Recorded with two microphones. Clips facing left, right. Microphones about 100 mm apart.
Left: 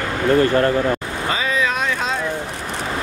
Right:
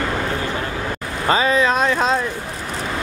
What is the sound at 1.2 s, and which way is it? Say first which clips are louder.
Speech: right 5 dB; 35° right (ahead or behind).